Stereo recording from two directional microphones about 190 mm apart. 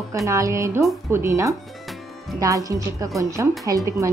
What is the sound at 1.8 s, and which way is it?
Music, centre (ahead or behind).